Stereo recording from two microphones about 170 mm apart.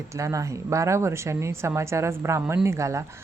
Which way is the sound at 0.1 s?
20° right (ahead or behind).